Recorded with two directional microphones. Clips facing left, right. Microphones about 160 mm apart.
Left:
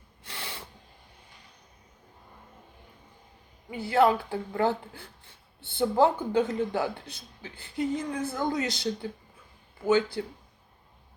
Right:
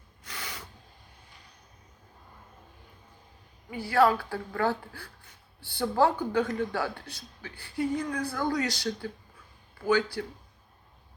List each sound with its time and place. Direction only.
0.3 s snort: 30° left (ahead or behind)
3.7 s speech: 20° left (ahead or behind)